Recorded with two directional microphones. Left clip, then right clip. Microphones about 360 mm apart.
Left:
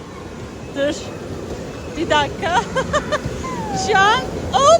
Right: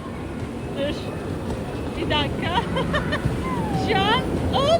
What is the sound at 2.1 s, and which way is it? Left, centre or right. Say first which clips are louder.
Speech: left 7 dB; centre.